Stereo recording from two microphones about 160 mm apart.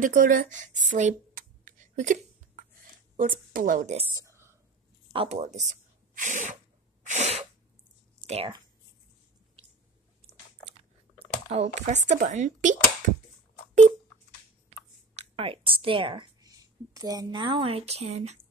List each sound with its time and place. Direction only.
0.0 s a sound: 55° right (ahead or behind)
3.2 s a woman's voice: 60° right (ahead or behind)
4.1 s a sound: 20° right (ahead or behind)
5.1 s sneeze: 40° right (ahead or behind)
8.3 s speech: 40° right (ahead or behind)
11.1 s speech: 45° right (ahead or behind)
15.1 s a woman's voice: 35° right (ahead or behind)